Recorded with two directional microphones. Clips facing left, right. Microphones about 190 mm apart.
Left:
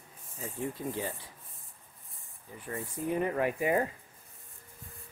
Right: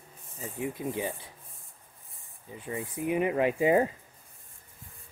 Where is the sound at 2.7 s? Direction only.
10° right (ahead or behind).